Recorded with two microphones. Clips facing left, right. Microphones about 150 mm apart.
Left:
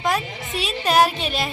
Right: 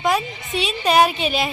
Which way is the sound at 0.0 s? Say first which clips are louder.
Right 2 dB; centre (ahead or behind).